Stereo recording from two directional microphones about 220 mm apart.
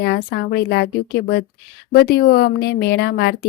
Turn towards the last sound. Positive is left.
turn(degrees=45)  # may be behind; listen again after turning